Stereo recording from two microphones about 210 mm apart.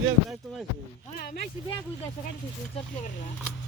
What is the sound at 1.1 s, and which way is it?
Speech, 50° left (ahead or behind).